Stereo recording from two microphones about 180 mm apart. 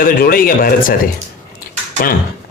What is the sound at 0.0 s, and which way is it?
Speech, 55° left (ahead or behind).